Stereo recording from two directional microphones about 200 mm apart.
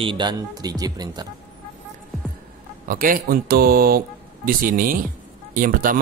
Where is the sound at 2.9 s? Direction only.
45° right (ahead or behind).